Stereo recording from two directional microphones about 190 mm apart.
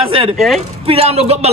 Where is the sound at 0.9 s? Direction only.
30° right (ahead or behind).